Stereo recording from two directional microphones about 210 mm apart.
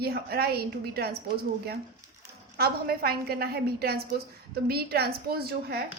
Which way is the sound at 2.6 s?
45° right (ahead or behind).